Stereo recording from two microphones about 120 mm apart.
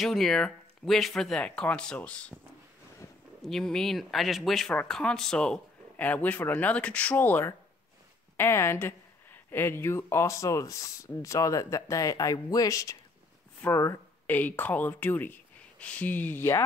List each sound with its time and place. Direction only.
0.0 s speech: 5° left (ahead or behind)
3.4 s speech: 5° left (ahead or behind); by 16.6 s 20° left (ahead or behind)